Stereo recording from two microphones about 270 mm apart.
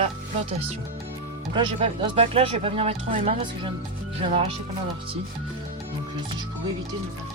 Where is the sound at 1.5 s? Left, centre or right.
Centre.